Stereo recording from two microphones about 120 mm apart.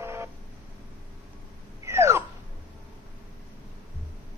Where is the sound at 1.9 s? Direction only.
25° right (ahead or behind).